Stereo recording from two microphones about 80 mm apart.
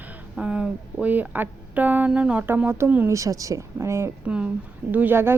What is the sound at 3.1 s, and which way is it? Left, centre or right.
Speech, right.